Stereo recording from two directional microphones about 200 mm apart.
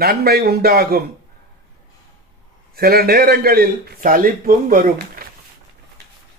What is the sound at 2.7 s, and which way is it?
A man's voice, 50° right (ahead or behind).